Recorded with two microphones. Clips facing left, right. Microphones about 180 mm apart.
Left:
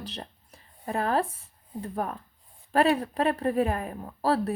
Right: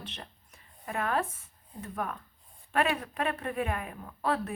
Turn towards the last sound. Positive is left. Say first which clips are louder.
# left 5 dB
turn(degrees=35)  # may be behind; listen again after turning